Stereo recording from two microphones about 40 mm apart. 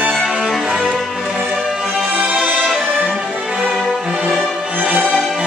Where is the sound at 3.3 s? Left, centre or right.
Right.